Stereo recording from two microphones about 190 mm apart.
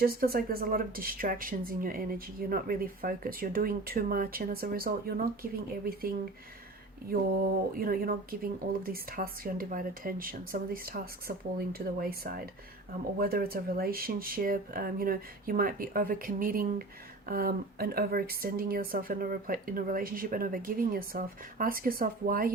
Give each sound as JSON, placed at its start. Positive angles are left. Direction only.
{"t": 0.0, "sound": "a woman's voice", "side_deg": -50}